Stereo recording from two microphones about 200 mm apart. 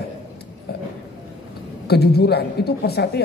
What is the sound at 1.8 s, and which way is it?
A man's voice, 55° left (ahead or behind).